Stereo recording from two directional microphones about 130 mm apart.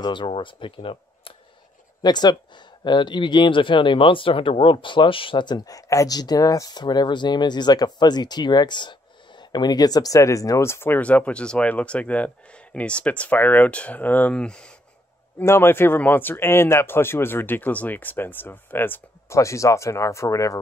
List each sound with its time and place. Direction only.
0.0 s speech: 40° left (ahead or behind); by 14.7 s 5° left (ahead or behind)
15.3 s speech: 20° left (ahead or behind)